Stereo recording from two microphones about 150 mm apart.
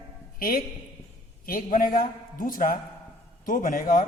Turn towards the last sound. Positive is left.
turn(degrees=65)  # may be behind; listen again after turning